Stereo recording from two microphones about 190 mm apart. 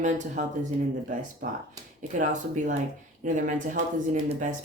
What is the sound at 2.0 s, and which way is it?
Speech, 40° right (ahead or behind).